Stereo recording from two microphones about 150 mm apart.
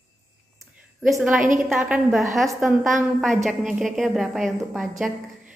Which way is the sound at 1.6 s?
Centre (ahead or behind).